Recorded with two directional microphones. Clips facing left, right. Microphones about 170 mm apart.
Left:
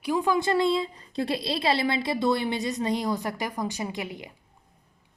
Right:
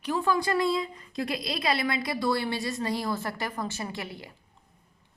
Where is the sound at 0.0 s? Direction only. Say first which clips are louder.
Left 2 dB; 15° left (ahead or behind).